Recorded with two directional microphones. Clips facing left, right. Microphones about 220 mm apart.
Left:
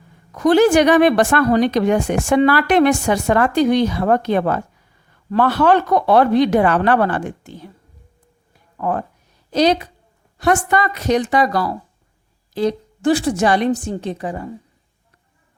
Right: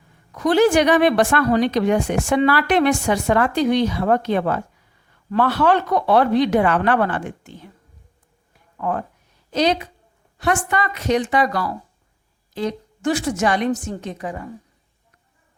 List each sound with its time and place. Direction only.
0.3 s a woman's voice: 45° left (ahead or behind)
8.8 s speech: 40° left (ahead or behind)